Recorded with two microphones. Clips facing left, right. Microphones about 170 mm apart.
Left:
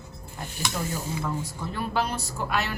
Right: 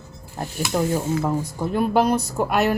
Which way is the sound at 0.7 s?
45° right (ahead or behind).